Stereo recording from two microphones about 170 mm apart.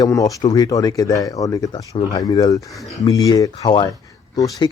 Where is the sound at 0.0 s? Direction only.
20° left (ahead or behind).